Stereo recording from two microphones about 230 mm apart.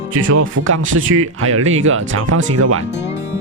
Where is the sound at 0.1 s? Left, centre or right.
Right.